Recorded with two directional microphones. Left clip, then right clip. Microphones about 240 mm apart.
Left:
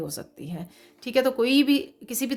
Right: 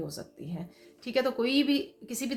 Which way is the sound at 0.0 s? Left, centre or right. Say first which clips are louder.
Left 4 dB; left.